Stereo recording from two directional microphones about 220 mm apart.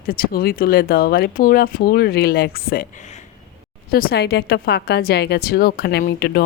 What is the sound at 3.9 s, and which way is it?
A woman's voice, 45° left (ahead or behind).